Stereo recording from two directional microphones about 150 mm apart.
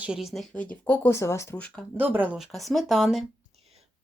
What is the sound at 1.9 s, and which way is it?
Speech, 10° right (ahead or behind).